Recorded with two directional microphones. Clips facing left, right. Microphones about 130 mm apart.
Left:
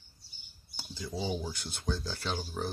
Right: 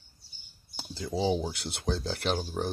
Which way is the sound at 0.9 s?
75° right (ahead or behind).